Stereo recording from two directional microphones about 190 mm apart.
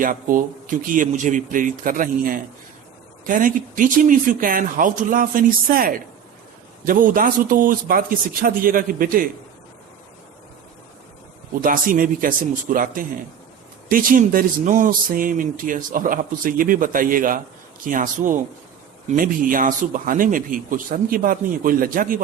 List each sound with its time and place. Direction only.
0.0 s speech: 45° right (ahead or behind)
11.6 s speech: 45° right (ahead or behind)